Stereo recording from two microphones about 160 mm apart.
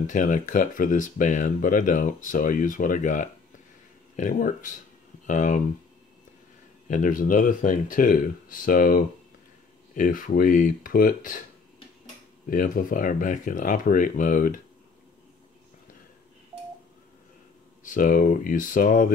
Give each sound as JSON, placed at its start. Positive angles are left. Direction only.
{"t": 0.0, "sound": "speech", "side_deg": 55}
{"t": 6.9, "sound": "speech", "side_deg": 55}
{"t": 12.4, "sound": "speech", "side_deg": 60}
{"t": 17.8, "sound": "speech", "side_deg": 60}